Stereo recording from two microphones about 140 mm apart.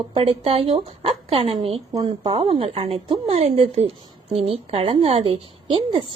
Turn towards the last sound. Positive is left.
turn(degrees=-40)  # may be behind; listen again after turning